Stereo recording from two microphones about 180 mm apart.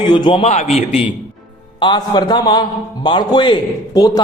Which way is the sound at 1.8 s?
25° left (ahead or behind).